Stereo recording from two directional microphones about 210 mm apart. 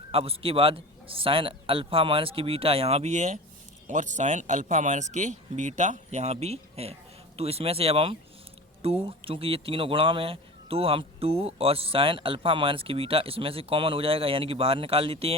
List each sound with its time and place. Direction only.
0.1 s speech: 25° right (ahead or behind)